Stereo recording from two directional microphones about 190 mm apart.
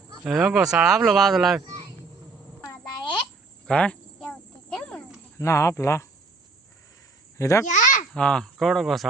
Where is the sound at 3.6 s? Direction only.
5° left (ahead or behind).